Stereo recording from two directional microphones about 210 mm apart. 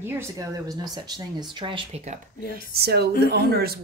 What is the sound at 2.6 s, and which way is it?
A woman's voice, 50° right (ahead or behind).